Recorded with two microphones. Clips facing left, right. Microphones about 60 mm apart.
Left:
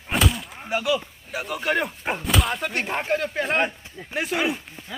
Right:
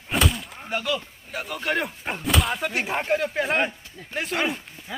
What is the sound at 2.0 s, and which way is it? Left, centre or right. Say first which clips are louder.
Speech: left 1 dB; centre.